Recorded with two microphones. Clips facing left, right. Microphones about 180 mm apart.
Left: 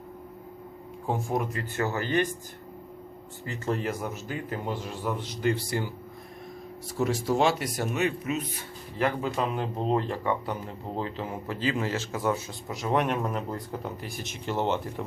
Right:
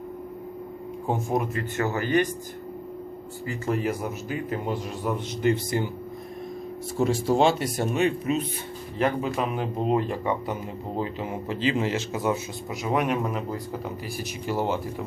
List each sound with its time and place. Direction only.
1.0 s speech: 20° right (ahead or behind)
3.4 s speech: 10° right (ahead or behind)
7.0 s speech: 30° right (ahead or behind)
12.7 s speech: 5° right (ahead or behind)